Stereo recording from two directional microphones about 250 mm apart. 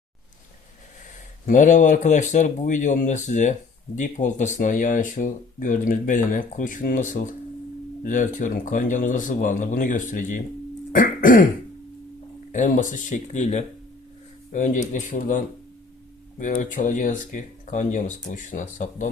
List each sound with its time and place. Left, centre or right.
1.5 s speech: left
10.9 s throat clearing: left
12.5 s speech: left